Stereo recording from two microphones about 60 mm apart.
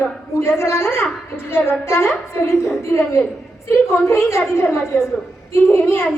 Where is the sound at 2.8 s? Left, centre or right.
Left.